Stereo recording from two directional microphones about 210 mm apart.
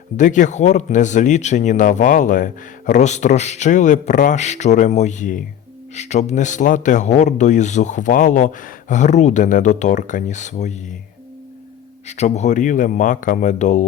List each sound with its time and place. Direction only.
0.2 s speech: 35° left (ahead or behind)
12.0 s speech: 30° left (ahead or behind)